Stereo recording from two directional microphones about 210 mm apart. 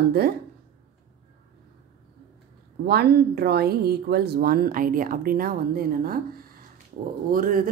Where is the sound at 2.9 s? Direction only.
50° right (ahead or behind).